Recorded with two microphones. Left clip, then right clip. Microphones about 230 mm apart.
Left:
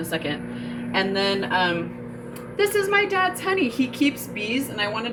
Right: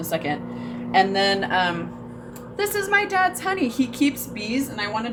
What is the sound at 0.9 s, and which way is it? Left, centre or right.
Speech, right.